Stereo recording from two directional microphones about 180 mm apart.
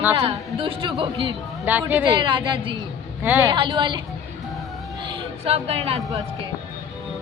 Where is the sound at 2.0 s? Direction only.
25° right (ahead or behind).